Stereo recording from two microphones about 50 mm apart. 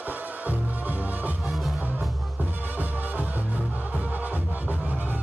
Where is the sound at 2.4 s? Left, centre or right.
Right.